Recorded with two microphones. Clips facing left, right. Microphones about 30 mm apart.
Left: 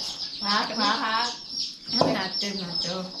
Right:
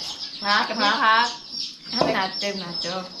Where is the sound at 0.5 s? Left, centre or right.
Right.